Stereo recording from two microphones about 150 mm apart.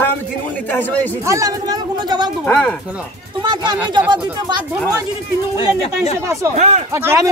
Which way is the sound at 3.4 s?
30° right (ahead or behind).